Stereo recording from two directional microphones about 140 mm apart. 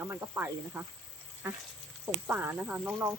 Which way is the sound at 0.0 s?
15° right (ahead or behind).